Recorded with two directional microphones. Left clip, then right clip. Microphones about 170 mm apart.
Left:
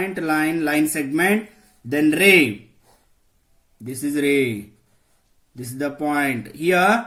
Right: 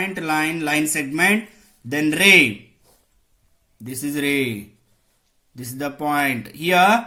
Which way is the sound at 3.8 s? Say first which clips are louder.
Left 2 dB; 15° right (ahead or behind).